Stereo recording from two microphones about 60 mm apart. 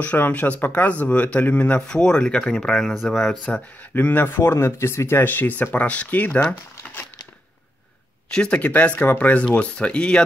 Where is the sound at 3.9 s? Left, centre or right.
Left.